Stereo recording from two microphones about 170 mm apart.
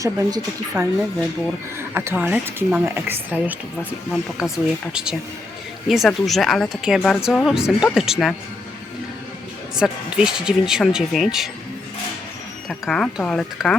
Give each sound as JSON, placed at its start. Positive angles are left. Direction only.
{"t": 0.0, "sound": "speech", "side_deg": -20}
{"t": 1.8, "sound": "speech", "side_deg": -15}
{"t": 9.7, "sound": "speech", "side_deg": -5}
{"t": 12.6, "sound": "speech", "side_deg": 0}